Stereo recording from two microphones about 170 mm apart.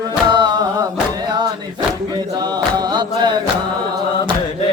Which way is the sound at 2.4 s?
25° right (ahead or behind).